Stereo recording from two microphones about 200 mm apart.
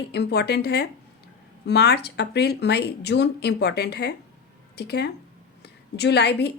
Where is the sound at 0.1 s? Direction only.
55° left (ahead or behind).